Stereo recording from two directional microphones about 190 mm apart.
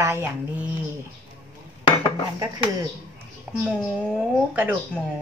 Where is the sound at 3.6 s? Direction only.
Centre (ahead or behind).